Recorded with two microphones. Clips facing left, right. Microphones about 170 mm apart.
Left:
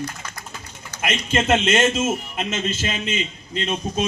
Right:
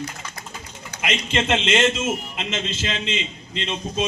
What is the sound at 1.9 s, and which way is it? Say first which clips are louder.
A man's voice: left 3 dB; 50° left (ahead or behind).